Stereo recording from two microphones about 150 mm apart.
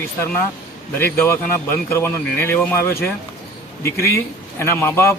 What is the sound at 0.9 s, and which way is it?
A man's voice, 15° left (ahead or behind).